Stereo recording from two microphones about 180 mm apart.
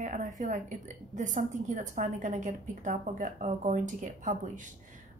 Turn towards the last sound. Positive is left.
turn(degrees=-45)  # may be behind; listen again after turning